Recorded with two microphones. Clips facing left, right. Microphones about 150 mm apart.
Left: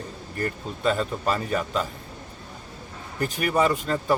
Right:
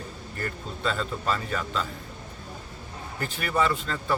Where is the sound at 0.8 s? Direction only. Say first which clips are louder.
Left 5 dB; 15° left (ahead or behind).